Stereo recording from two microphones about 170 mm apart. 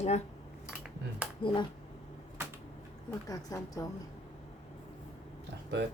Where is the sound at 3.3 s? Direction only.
20° left (ahead or behind).